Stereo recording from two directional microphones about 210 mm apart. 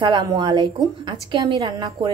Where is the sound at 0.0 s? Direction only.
20° right (ahead or behind).